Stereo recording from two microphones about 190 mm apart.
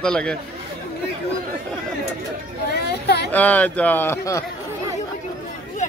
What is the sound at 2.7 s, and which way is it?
Speech, 60° left (ahead or behind).